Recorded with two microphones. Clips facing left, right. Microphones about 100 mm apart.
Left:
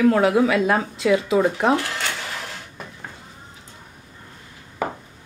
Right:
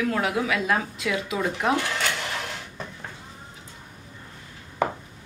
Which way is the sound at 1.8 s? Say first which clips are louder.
Even; centre (ahead or behind).